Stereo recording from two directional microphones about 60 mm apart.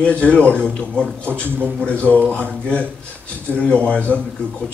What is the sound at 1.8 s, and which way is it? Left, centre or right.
Speech, left.